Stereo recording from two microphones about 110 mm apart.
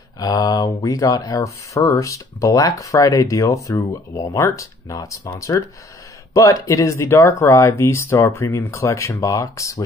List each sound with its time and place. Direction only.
0.2 s speech: 35° left (ahead or behind)